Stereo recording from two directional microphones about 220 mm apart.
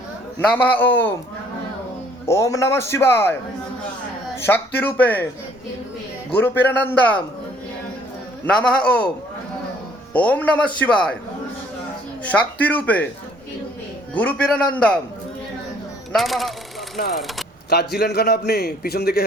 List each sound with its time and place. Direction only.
0.3 s a man's voice: 10° left (ahead or behind)
2.2 s a man's voice: 15° left (ahead or behind)
4.4 s a man's voice: 10° left (ahead or behind)
6.3 s a man's voice: 10° left (ahead or behind)
8.4 s a man's voice: 5° left (ahead or behind)
10.1 s a man's voice: 5° left (ahead or behind)
12.2 s a man's voice: 5° left (ahead or behind)
14.1 s a man's voice: 5° left (ahead or behind)
16.1 s a man's voice: centre (ahead or behind)
17.7 s a man's voice: 45° left (ahead or behind)